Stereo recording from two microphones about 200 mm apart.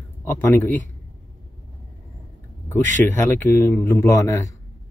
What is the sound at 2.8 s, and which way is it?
Speech, 40° right (ahead or behind).